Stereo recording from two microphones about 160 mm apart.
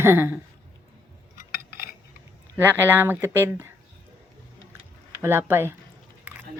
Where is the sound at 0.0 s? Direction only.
15° right (ahead or behind).